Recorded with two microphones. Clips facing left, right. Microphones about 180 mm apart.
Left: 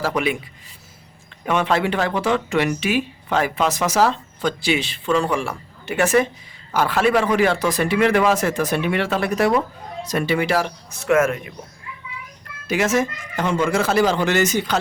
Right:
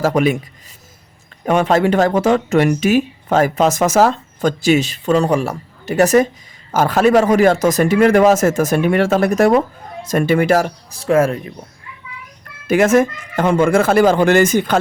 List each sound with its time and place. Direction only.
0.0 s a man's voice: 45° right (ahead or behind)
1.5 s a man's voice: 40° right (ahead or behind)
12.6 s a man's voice: 50° right (ahead or behind)